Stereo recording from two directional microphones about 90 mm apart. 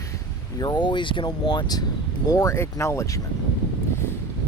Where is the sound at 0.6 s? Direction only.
55° left (ahead or behind).